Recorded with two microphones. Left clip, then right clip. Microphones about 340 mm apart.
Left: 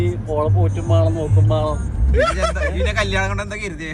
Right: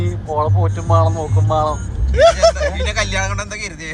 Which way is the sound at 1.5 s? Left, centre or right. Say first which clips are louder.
Right 5 dB; right.